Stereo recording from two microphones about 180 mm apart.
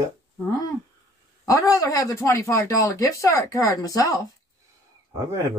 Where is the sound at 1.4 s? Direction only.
20° left (ahead or behind).